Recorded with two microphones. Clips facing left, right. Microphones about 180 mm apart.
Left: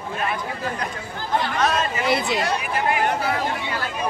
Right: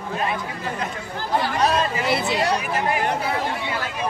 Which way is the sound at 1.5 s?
35° right (ahead or behind).